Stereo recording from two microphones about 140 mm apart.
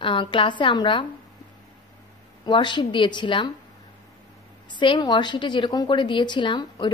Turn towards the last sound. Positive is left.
turn(degrees=35)  # may be behind; listen again after turning